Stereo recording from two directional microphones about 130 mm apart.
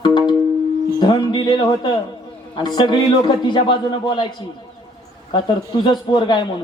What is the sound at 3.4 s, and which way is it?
Speech, 35° left (ahead or behind).